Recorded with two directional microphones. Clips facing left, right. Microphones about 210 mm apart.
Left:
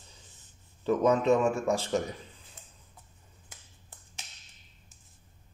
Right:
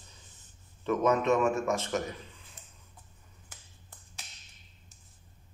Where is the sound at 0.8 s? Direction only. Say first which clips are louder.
Left 2 dB; 35° left (ahead or behind).